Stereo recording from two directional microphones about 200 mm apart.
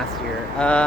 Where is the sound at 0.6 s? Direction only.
5° left (ahead or behind).